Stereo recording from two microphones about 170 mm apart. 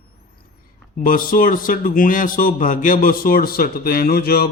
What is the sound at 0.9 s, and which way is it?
A man's voice, 55° left (ahead or behind).